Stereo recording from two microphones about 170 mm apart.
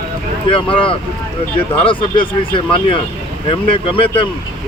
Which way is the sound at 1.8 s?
30° left (ahead or behind).